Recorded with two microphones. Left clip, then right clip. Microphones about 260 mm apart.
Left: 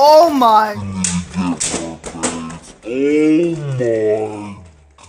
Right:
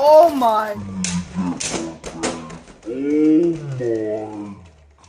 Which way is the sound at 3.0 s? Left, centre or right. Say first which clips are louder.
Left 3 dB; left.